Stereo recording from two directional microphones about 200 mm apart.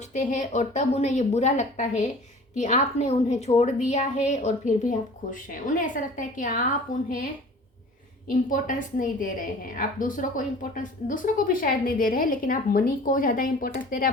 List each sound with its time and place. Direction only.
0.1 s a woman's voice: 35° left (ahead or behind)
8.4 s a woman's voice: 40° left (ahead or behind)